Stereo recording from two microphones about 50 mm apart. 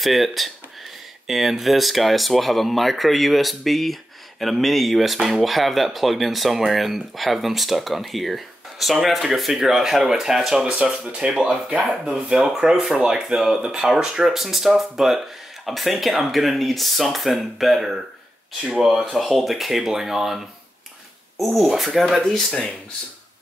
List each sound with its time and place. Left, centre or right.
0.0 s speech: centre
19.1 s speech: centre
22.5 s speech: centre